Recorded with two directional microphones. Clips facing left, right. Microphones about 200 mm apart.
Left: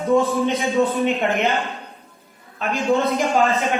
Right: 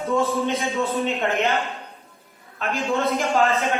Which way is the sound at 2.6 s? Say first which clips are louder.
Left 4 dB; 15° left (ahead or behind).